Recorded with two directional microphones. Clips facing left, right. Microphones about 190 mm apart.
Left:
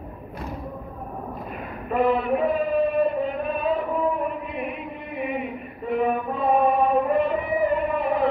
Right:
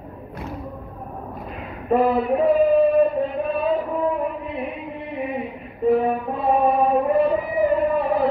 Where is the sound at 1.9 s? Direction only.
35° right (ahead or behind).